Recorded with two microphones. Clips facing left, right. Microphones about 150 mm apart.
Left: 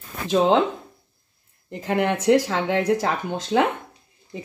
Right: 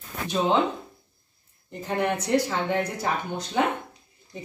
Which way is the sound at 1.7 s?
90° left.